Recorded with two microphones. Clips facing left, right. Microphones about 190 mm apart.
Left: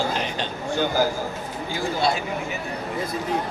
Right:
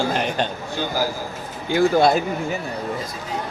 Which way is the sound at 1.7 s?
60° right (ahead or behind).